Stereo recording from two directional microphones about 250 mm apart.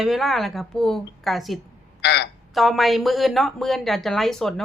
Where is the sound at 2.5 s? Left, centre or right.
Centre.